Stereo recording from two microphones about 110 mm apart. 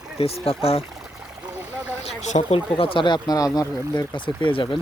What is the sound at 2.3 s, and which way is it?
Speech, 60° left (ahead or behind).